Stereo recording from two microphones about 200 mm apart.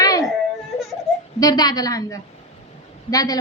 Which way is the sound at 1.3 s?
20° left (ahead or behind).